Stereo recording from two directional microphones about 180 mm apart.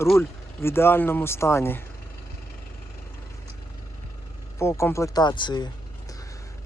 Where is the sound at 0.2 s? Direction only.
15° left (ahead or behind).